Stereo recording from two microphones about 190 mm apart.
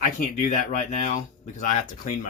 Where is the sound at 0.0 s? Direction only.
40° left (ahead or behind).